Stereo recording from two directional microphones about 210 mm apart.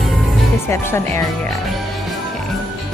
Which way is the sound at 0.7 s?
10° left (ahead or behind).